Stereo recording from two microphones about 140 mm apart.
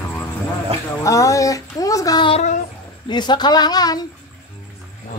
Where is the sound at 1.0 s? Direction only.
20° left (ahead or behind).